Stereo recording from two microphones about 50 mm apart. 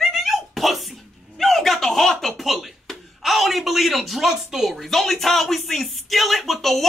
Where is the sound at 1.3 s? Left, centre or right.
Centre.